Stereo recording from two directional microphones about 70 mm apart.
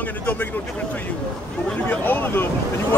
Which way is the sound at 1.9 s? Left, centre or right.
Left.